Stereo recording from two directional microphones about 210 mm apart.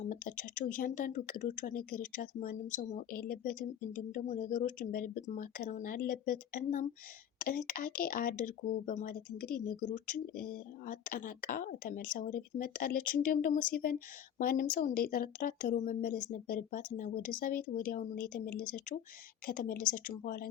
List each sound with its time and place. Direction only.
0.0 s speech: 40° left (ahead or behind)
7.3 s a sound: 40° left (ahead or behind)
7.7 s speech: 40° left (ahead or behind)